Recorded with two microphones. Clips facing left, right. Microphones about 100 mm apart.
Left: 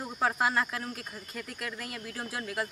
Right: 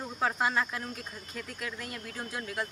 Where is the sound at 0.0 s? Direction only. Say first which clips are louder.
Left 1 dB; 5° left (ahead or behind).